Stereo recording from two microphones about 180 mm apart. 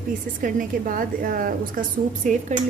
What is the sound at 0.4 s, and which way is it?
A woman's voice, 50° right (ahead or behind).